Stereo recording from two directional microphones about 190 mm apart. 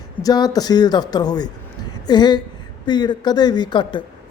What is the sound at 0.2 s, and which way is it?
A woman's voice, 20° left (ahead or behind).